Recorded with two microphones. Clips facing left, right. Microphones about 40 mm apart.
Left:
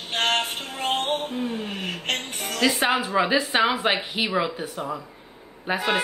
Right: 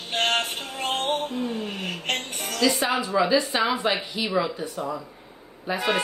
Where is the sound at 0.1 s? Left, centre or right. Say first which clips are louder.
Even; centre.